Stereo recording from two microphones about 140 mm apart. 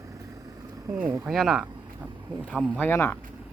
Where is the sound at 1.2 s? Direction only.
Centre (ahead or behind).